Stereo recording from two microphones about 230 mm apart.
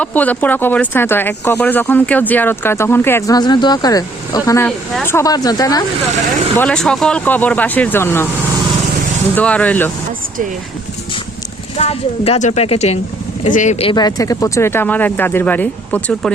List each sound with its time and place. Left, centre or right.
0.0 s speech: centre
6.6 s speech: centre
9.3 s speech: centre
11.8 s speech: left; by 16.3 s centre